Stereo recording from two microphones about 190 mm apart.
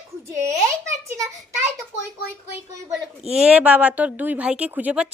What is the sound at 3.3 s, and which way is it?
A woman's voice, 5° right (ahead or behind).